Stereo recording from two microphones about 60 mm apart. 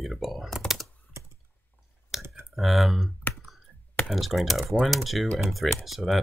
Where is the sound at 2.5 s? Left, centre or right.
Centre.